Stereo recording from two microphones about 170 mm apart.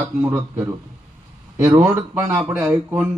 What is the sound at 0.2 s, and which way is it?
Speech, 10° right (ahead or behind).